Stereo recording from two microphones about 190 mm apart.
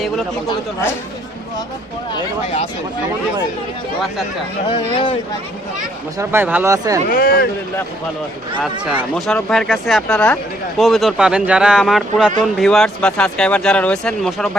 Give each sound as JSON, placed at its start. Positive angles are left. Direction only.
{"t": 0.4, "sound": "speech", "side_deg": 15}
{"t": 4.7, "sound": "speech", "side_deg": 25}
{"t": 6.1, "sound": "speech", "side_deg": -10}
{"t": 7.1, "sound": "speech", "side_deg": 50}
{"t": 8.8, "sound": "speech", "side_deg": 0}